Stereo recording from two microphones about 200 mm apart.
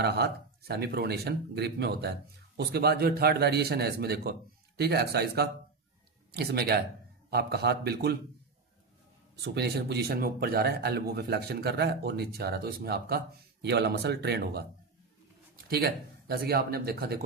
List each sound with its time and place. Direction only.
0.0 s speech: 55° right (ahead or behind)
9.4 s speech: 50° right (ahead or behind)
15.7 s speech: 50° right (ahead or behind)